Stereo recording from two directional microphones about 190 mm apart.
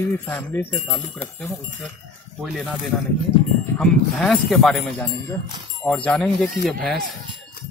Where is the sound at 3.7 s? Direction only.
5° left (ahead or behind).